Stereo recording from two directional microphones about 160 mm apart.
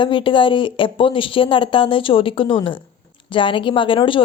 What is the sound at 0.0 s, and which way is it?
Speech, 30° left (ahead or behind).